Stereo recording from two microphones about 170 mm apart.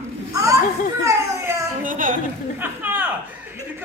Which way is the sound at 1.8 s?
50° right (ahead or behind).